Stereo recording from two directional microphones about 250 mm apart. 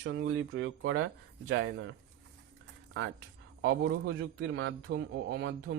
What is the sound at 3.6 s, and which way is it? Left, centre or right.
A man's voice, right.